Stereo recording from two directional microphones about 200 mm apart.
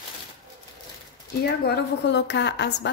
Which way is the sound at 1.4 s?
55° left (ahead or behind).